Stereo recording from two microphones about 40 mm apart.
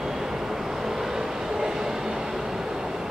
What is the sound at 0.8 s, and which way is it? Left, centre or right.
Vehicle, centre.